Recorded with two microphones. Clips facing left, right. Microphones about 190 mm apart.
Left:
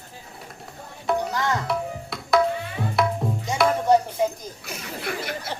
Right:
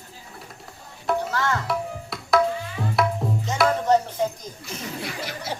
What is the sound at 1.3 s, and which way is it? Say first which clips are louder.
Tabla: even; 15° left (ahead or behind).